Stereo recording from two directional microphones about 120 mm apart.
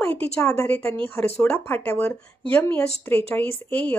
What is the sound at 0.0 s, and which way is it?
Speech, 15° left (ahead or behind).